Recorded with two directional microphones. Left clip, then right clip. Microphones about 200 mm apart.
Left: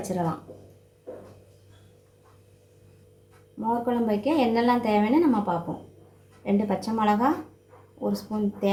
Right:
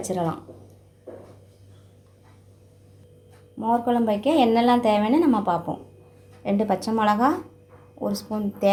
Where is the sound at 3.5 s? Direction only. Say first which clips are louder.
Right 4 dB; 35° right (ahead or behind).